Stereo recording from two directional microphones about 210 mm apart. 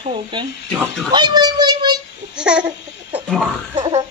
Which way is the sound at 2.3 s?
5° right (ahead or behind).